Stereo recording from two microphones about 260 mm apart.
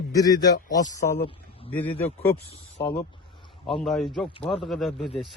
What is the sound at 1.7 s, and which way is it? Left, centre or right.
Speech, centre.